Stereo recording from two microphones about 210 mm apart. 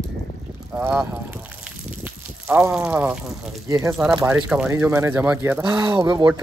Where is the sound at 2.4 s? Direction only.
5° right (ahead or behind).